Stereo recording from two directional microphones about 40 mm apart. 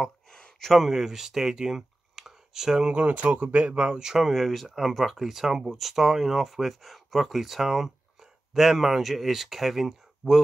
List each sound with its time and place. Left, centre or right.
0.3 s a sound: centre
0.7 s speech: centre
2.9 s speech: right
4.0 s speech: centre